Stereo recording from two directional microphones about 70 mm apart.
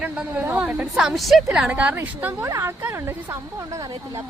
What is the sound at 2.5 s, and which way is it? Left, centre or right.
Speech, right.